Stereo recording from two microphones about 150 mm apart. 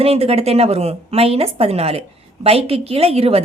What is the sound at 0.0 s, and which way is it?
A woman's voice, 40° right (ahead or behind).